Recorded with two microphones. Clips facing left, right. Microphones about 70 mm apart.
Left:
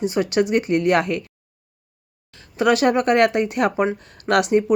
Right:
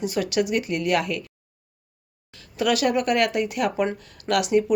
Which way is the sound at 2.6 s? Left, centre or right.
Left.